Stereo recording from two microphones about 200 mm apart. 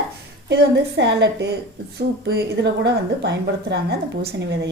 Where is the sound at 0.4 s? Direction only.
60° right (ahead or behind).